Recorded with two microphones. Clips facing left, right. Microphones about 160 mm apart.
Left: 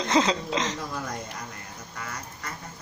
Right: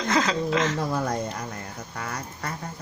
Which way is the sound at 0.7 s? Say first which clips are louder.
Right 7 dB; 55° right (ahead or behind).